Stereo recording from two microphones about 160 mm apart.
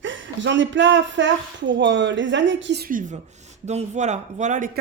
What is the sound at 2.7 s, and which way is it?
Speech, 70° right (ahead or behind).